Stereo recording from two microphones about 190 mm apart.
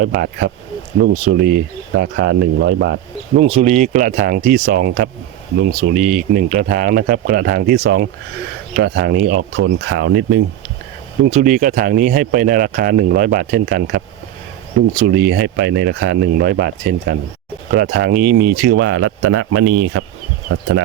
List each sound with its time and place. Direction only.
0.2 s speech: 55° right (ahead or behind)
2.0 s speech: 60° right (ahead or behind)
3.3 s speech: 35° right (ahead or behind)
9.4 s speech: 70° right (ahead or behind)
11.3 s speech: 40° right (ahead or behind); by 20.1 s 80° right